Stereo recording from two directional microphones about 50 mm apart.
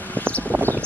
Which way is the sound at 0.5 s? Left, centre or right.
Right.